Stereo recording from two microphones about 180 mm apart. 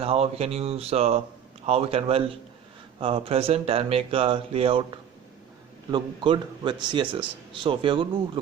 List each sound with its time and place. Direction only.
0.0 s speech: 35° right (ahead or behind)
5.9 s speech: 25° right (ahead or behind)